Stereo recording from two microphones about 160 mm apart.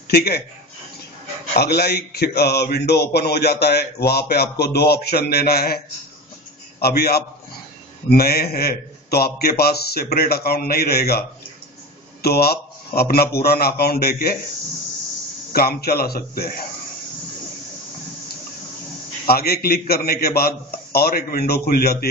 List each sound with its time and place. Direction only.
0.1 s speech: 85° left
1.6 s speech: 90° left
6.8 s a man's voice: 75° left (ahead or behind)
15.5 s a man's voice: 70° left (ahead or behind)
19.2 s a man's voice: 75° left (ahead or behind)